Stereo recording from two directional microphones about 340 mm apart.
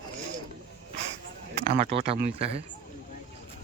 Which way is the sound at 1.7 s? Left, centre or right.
Centre.